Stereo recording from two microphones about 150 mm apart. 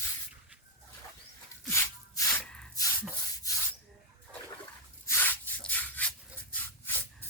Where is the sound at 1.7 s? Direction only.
20° left (ahead or behind).